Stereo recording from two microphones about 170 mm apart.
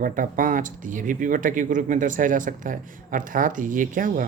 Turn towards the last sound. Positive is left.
turn(degrees=-50)  # may be behind; listen again after turning